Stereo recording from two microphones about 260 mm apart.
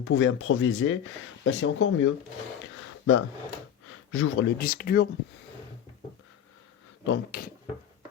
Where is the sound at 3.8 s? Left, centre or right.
Left.